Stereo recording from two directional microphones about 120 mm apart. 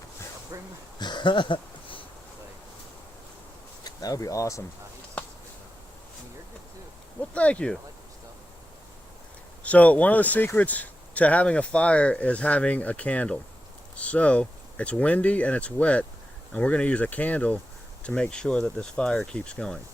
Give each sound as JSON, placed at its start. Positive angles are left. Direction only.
{"t": 0.5, "sound": "speech", "side_deg": -25}
{"t": 0.9, "sound": "a sound", "side_deg": 40}
{"t": 3.8, "sound": "speech", "side_deg": 30}
{"t": 7.2, "sound": "speech", "side_deg": 10}
{"t": 9.6, "sound": "speech", "side_deg": 10}